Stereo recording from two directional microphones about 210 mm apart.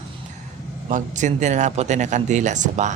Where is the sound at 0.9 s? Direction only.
35° right (ahead or behind).